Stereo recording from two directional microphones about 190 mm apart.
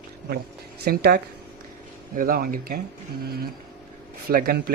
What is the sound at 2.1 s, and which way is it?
Speech, 50° right (ahead or behind).